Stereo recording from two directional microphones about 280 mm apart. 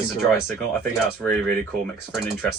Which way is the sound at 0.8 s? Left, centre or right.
Centre.